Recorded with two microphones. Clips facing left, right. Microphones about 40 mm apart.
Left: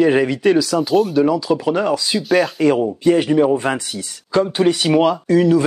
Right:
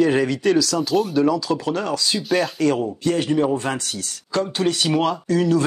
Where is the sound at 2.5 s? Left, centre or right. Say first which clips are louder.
Left 4 dB; centre.